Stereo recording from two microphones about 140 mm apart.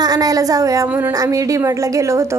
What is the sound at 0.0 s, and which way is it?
A woman's voice, 25° right (ahead or behind).